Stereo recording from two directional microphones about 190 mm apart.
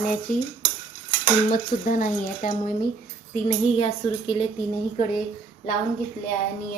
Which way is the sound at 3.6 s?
30° left (ahead or behind).